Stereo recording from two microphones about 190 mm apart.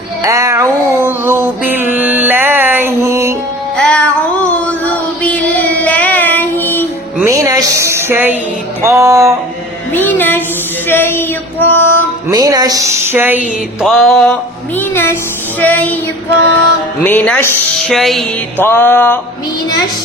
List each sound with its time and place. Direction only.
0.2 s music: 15° right (ahead or behind)
3.8 s music: 5° left (ahead or behind)
5.2 s child singing: 10° left (ahead or behind)
7.2 s a sound: 15° right (ahead or behind)
8.8 s music: 15° right (ahead or behind)
9.9 s music: 10° left (ahead or behind)
12.3 s a sound: 20° right (ahead or behind)
13.8 s music: centre (ahead or behind)
14.8 s music: 10° left (ahead or behind)
17.0 s music: 10° left (ahead or behind)